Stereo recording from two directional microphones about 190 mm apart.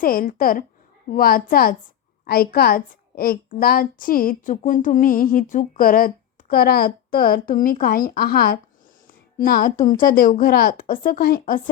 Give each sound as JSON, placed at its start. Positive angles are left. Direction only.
{"t": 0.0, "sound": "a woman's voice", "side_deg": 50}